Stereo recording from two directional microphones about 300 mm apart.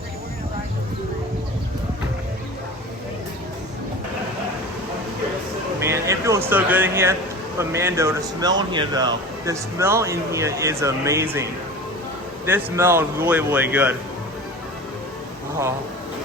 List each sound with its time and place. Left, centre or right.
5.8 s a sound: centre
7.6 s speech: centre
12.5 s speech: centre